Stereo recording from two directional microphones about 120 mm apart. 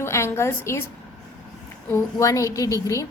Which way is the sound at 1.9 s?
25° left (ahead or behind).